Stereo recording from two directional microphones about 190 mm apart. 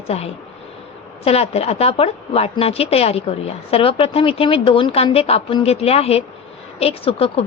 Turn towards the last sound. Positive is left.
turn(degrees=30)  # may be behind; listen again after turning